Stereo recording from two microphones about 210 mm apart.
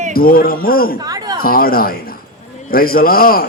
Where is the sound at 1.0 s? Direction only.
20° right (ahead or behind).